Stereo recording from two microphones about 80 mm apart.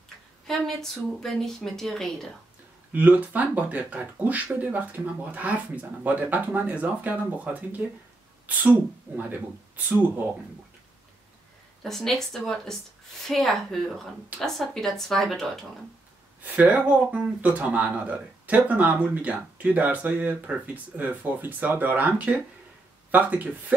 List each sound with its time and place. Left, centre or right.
0.5 s speech: centre
2.9 s speech: right
11.8 s speech: centre
16.4 s speech: centre